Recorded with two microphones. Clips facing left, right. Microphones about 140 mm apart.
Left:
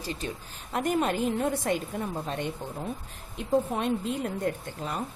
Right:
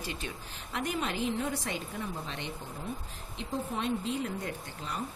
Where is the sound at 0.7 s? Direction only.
50° left (ahead or behind).